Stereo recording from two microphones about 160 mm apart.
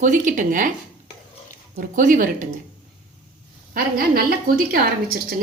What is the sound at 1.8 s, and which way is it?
Speech, 55° right (ahead or behind).